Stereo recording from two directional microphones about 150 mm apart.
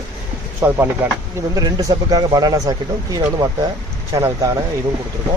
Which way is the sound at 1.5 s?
25° right (ahead or behind).